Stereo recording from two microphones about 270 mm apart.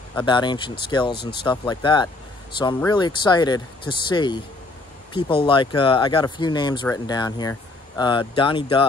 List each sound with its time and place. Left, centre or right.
0.2 s speech: centre